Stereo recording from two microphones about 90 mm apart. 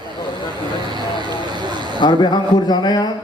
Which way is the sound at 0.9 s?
60° right (ahead or behind).